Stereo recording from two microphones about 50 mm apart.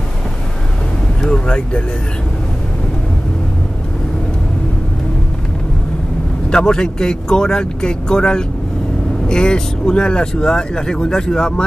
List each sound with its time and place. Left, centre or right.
1.2 s speech: left
6.5 s speech: centre